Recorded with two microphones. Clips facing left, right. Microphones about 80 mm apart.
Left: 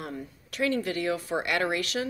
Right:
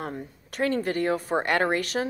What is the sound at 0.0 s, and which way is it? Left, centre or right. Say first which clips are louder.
Speech: right 3 dB; right.